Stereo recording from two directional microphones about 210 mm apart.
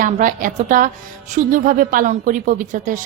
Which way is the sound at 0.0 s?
40° right (ahead or behind).